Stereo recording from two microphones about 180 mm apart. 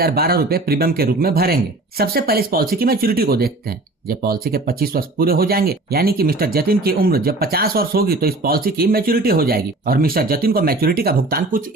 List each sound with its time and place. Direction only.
0.0 s speech: 60° right (ahead or behind)